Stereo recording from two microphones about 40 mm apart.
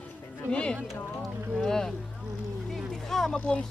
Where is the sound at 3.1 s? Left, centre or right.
Centre.